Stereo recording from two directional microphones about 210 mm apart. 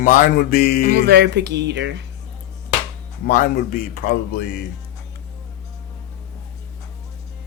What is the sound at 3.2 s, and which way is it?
Speech, 45° left (ahead or behind).